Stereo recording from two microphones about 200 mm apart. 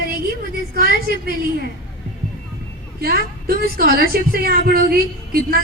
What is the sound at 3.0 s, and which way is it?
Speech, 50° right (ahead or behind).